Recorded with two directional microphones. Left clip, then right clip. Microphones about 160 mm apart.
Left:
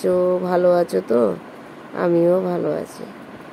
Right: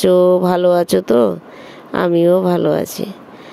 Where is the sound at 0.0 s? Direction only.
55° right (ahead or behind).